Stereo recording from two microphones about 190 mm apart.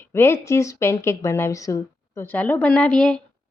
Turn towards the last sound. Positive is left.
turn(degrees=5)  # may be behind; listen again after turning